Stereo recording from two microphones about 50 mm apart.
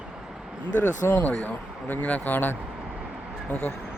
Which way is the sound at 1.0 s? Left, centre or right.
Left.